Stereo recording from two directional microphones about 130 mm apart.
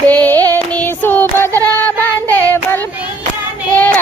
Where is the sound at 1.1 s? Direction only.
15° left (ahead or behind).